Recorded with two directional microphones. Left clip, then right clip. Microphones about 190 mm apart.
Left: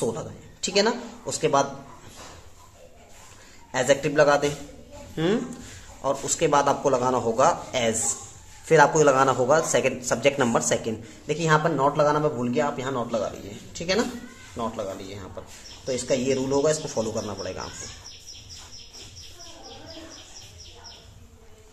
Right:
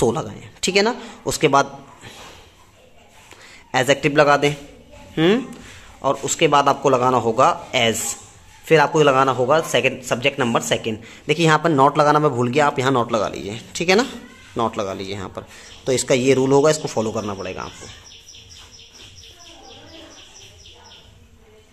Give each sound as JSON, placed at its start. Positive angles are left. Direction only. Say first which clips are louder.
{"t": 0.0, "sound": "speech", "louder": "right 8 dB", "side_deg": -35}
{"t": 3.7, "sound": "a man's voice", "louder": "right 5 dB", "side_deg": -30}
{"t": 11.2, "sound": "speech", "louder": "right 6 dB", "side_deg": -35}